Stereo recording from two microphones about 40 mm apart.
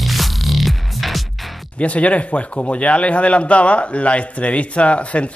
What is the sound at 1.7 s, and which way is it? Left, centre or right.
A man's voice, left.